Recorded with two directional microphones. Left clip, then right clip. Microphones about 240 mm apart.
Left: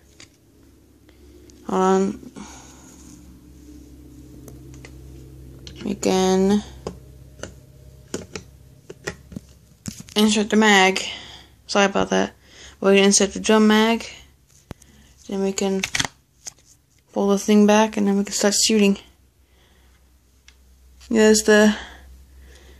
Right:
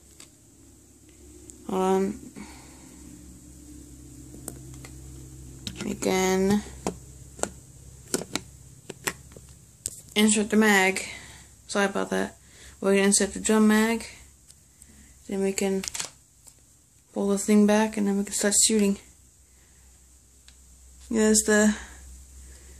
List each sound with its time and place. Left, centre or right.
1.7 s speech: centre
5.6 s typing: right
5.9 s speech: centre
10.1 s a woman's voice: centre
15.2 s speech: centre
17.1 s speech: centre
21.1 s speech: centre